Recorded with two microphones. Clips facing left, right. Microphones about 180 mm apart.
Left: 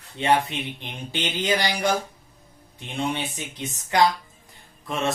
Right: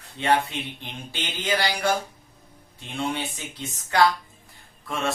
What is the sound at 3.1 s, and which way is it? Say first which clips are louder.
Speech: left 1 dB; 15° left (ahead or behind).